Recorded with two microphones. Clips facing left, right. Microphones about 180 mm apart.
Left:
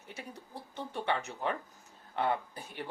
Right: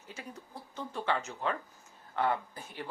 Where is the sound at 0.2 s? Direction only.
15° left (ahead or behind).